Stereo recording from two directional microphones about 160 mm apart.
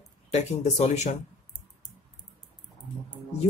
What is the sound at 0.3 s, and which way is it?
Speech, 45° left (ahead or behind).